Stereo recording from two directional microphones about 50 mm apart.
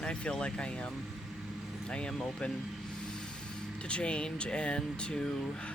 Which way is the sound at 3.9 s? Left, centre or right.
Left.